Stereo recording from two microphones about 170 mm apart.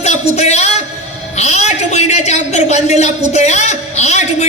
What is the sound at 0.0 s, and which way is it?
A man's voice, 40° left (ahead or behind).